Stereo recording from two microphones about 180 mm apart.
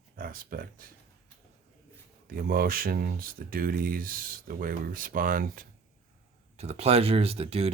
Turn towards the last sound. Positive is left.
turn(degrees=-35)  # may be behind; listen again after turning